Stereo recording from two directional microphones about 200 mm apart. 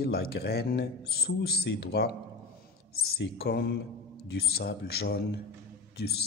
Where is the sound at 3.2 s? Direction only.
55° left (ahead or behind).